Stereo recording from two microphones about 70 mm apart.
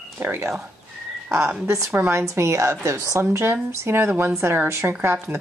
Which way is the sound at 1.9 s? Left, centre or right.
Right.